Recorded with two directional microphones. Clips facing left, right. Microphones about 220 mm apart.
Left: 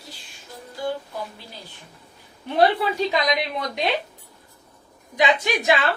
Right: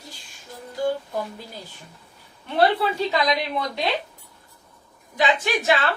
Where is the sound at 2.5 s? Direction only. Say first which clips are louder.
Left 1 dB; 15° left (ahead or behind).